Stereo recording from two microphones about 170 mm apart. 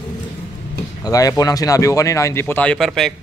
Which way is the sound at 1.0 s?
20° left (ahead or behind).